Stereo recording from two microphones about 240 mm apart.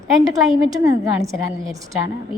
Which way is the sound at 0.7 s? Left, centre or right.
Centre.